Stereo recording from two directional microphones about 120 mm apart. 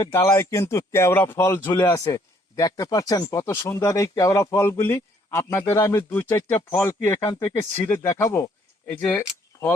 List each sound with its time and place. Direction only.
0.1 s speech: 20° left (ahead or behind)
7.2 s speech: 30° left (ahead or behind)